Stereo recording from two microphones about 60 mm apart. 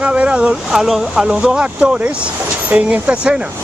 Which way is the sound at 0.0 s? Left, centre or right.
Right.